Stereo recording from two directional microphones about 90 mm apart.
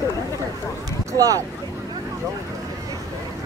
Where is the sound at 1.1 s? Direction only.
40° right (ahead or behind).